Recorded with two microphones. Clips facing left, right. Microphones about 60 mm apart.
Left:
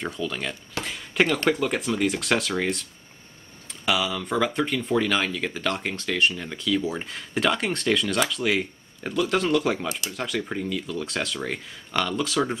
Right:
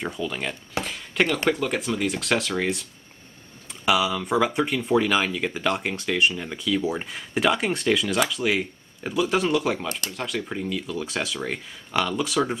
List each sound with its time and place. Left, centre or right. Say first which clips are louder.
0.0 s speech: right 1 dB; centre
9.8 s speech: even; right
10.1 s speech: left 1 dB; centre